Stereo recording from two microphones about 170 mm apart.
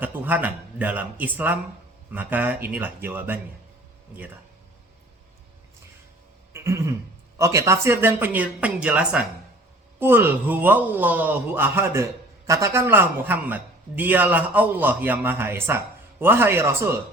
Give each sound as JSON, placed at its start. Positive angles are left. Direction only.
{"t": 0.0, "sound": "a man's voice", "side_deg": -10}
{"t": 6.5, "sound": "a sound", "side_deg": -15}
{"t": 7.3, "sound": "a man's voice", "side_deg": -20}